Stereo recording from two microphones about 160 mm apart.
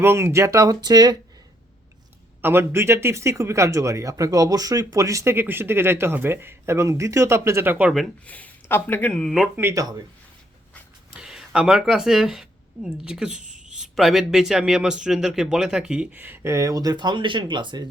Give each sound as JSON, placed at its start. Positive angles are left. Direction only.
{"t": 0.0, "sound": "speech", "side_deg": -15}
{"t": 2.4, "sound": "speech", "side_deg": -15}
{"t": 8.3, "sound": "speech", "side_deg": 10}
{"t": 9.6, "sound": "speech", "side_deg": -20}
{"t": 11.1, "sound": "speech", "side_deg": -5}